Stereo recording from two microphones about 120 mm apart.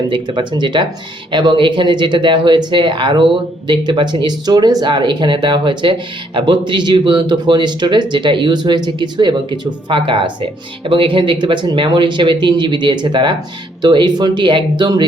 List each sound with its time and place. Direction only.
0.1 s speech: 40° right (ahead or behind)